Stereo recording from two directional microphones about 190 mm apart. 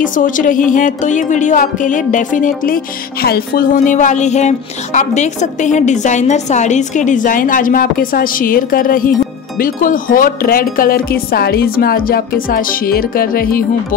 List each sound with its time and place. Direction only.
0.0 s speech: 45° left (ahead or behind)